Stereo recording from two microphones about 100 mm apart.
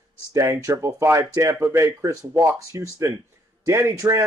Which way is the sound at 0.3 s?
35° right (ahead or behind).